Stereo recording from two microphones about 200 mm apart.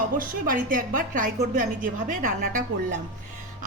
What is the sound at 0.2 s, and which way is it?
A woman's voice, 45° right (ahead or behind).